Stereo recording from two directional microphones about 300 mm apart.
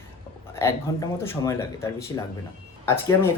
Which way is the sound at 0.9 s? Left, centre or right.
Centre.